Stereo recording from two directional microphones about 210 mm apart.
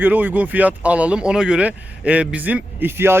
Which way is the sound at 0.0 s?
10° right (ahead or behind).